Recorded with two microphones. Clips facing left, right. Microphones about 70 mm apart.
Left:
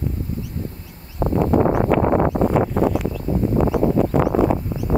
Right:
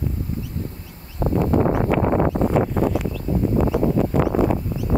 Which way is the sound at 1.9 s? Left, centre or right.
Left.